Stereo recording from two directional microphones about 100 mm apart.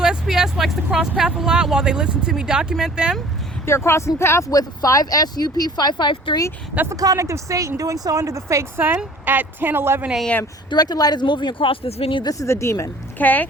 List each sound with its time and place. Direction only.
0.0 s speech: 5° right (ahead or behind)
3.7 s speech: 25° left (ahead or behind); by 6.4 s 50° left (ahead or behind)
6.9 s speech: 35° right (ahead or behind)
9.2 s speech: 20° right (ahead or behind)
10.7 s speech: 45° left (ahead or behind); by 12.2 s 75° left (ahead or behind)
12.2 s speech: 35° left (ahead or behind)
13.1 s speech: 15° left (ahead or behind)